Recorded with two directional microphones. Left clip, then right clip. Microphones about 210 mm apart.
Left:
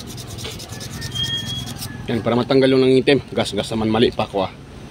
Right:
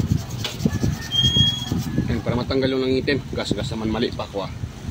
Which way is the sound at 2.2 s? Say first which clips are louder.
Left 8 dB; 40° left (ahead or behind).